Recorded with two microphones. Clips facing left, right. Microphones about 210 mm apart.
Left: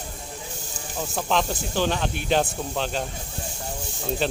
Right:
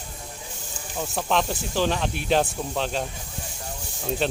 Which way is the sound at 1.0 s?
Centre (ahead or behind).